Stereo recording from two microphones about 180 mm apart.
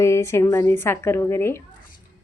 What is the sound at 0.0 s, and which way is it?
Speech, 15° left (ahead or behind).